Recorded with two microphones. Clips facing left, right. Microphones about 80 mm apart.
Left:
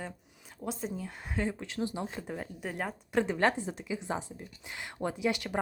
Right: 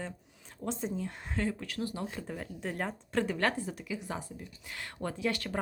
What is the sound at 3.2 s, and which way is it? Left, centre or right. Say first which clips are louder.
Speech: left 3 dB; left.